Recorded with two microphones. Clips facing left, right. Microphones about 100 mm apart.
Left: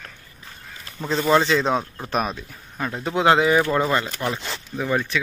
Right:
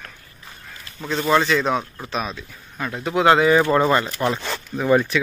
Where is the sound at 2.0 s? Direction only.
45° left (ahead or behind).